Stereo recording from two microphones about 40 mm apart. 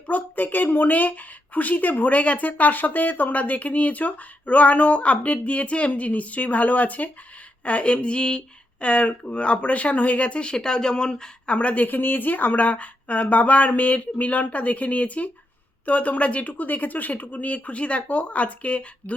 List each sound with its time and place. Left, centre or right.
0.1 s speech: left; by 11.5 s centre
11.5 s speech: left